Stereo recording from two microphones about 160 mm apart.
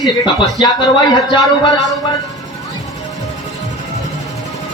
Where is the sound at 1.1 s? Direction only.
25° left (ahead or behind).